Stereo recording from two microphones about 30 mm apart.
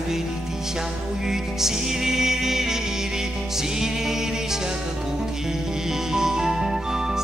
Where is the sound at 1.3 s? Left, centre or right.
Centre.